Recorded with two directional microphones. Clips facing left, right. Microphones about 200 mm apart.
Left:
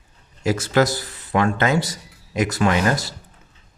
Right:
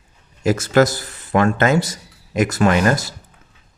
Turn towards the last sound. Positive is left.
turn(degrees=-50)  # may be behind; listen again after turning